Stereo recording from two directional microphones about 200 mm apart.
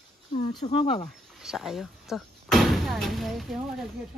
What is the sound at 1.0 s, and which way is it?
Speech, centre (ahead or behind).